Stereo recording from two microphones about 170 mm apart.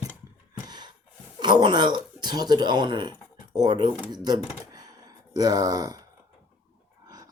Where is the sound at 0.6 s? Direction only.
25° right (ahead or behind).